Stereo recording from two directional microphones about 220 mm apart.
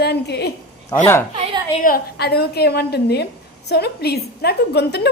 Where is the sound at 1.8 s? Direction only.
45° left (ahead or behind).